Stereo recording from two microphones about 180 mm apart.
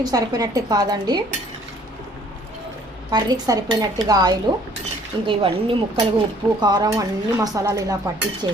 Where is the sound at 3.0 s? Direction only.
25° right (ahead or behind).